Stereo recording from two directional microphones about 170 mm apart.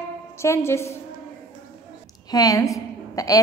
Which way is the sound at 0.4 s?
15° left (ahead or behind).